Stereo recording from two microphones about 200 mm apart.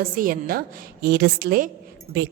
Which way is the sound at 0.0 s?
45° right (ahead or behind).